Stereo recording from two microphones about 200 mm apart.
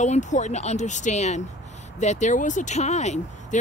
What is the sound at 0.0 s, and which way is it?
Speech, 35° left (ahead or behind).